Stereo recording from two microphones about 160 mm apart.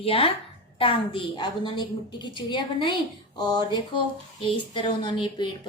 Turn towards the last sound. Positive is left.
turn(degrees=30)  # may be behind; listen again after turning